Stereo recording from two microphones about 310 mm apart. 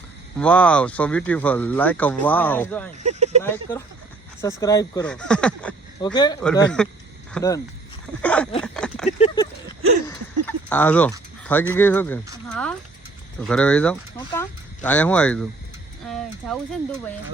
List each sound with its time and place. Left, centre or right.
0.3 s speech: centre
3.0 s speech: right
3.4 s speech: centre
6.6 s speech: centre
9.0 s a sound: centre
10.1 s speech: centre
13.4 s speech: centre